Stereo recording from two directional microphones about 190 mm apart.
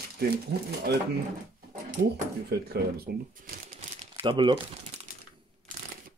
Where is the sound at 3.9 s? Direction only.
25° right (ahead or behind).